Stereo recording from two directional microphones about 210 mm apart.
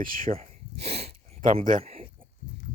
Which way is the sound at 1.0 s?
40° right (ahead or behind).